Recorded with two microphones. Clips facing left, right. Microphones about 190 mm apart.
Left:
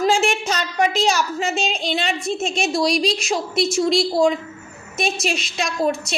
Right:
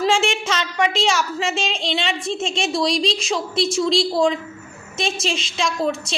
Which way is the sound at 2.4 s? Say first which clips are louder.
Left 1 dB; 25° right (ahead or behind).